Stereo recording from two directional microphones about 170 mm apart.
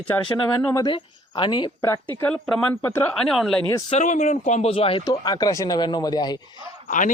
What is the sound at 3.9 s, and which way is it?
Speech, 45° left (ahead or behind).